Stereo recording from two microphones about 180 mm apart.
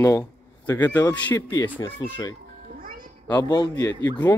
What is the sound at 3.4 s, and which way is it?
Speech, 20° left (ahead or behind).